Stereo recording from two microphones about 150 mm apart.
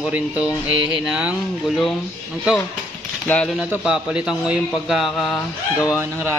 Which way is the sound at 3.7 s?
5° right (ahead or behind).